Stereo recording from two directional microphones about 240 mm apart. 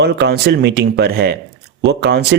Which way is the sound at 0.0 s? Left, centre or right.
Right.